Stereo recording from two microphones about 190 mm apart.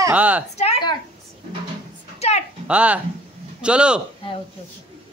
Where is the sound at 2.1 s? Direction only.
35° left (ahead or behind).